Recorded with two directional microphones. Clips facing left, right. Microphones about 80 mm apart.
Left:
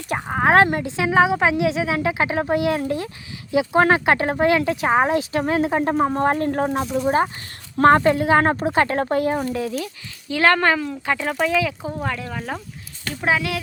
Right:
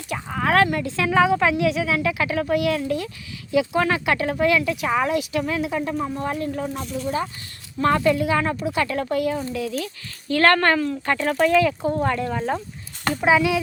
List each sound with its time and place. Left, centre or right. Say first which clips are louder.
0.3 s speech: left 3 dB; left
6.9 s speech: left 6 dB; left
10.2 s speech: even; centre